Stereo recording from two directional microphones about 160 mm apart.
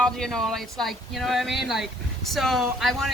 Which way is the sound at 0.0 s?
5° left (ahead or behind).